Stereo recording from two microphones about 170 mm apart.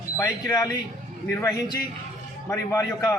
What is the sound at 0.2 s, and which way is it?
A man's voice, 20° left (ahead or behind).